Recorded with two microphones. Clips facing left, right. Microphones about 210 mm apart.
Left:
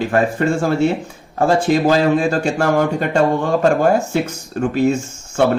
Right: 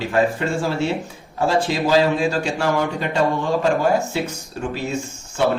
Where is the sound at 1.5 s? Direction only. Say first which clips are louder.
Left 5 dB; 50° left (ahead or behind).